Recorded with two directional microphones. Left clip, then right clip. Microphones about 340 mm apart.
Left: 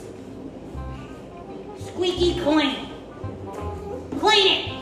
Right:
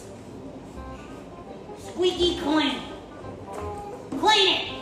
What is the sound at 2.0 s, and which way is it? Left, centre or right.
Speech, centre.